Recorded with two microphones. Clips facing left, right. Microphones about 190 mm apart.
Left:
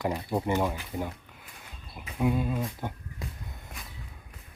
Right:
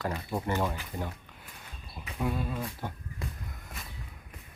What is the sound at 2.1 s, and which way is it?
Speech, 15° left (ahead or behind).